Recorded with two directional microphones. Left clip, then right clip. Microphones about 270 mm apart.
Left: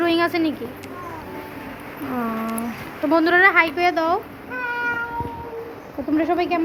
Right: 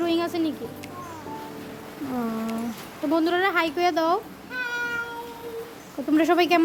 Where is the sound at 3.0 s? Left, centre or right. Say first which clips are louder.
Left 7 dB; centre.